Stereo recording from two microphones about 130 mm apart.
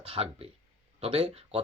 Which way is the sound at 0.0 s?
50° right (ahead or behind).